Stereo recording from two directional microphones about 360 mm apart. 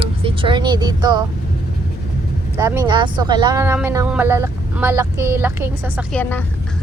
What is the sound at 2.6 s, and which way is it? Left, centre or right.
Speech, centre.